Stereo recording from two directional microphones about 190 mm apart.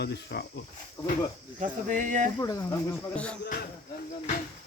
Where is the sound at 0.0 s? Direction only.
60° left (ahead or behind).